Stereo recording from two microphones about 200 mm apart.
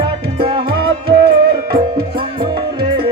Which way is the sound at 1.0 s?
50° right (ahead or behind).